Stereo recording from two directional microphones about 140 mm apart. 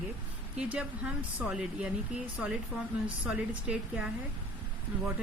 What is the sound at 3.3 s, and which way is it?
Speech, 10° right (ahead or behind).